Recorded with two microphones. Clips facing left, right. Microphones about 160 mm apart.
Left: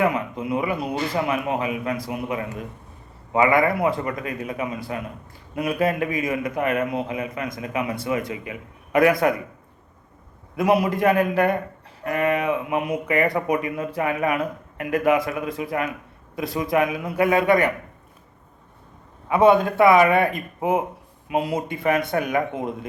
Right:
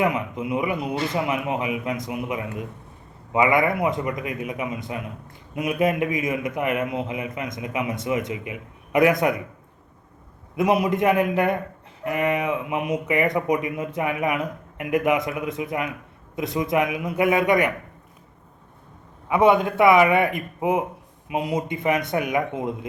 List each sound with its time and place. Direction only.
0.0 s speech: 20° right (ahead or behind)
10.8 s speech: 20° right (ahead or behind)
19.3 s speech: 20° right (ahead or behind)